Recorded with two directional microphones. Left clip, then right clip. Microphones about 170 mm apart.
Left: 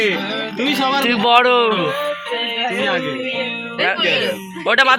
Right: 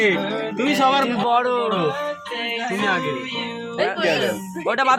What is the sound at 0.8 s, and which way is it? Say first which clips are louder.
Speech: right 2 dB; 10° right (ahead or behind).